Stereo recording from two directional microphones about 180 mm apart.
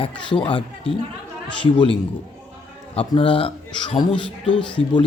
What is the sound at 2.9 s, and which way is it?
Speech, 30° left (ahead or behind).